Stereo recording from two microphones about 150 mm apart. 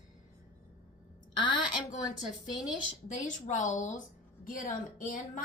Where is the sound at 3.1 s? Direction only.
55° left (ahead or behind).